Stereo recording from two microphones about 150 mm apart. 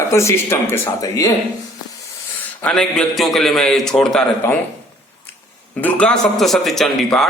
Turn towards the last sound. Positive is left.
turn(degrees=0)  # may be behind; listen again after turning